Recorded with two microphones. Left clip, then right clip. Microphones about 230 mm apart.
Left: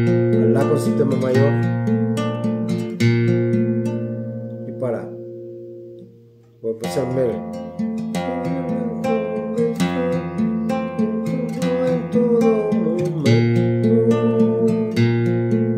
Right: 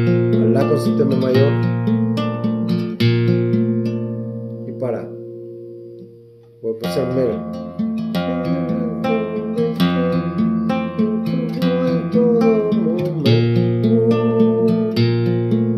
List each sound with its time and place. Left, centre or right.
0.1 s music: centre
0.5 s speech: centre
1.1 s music: centre
7.8 s music: right